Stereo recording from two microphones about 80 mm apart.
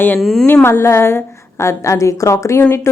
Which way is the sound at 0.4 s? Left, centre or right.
Left.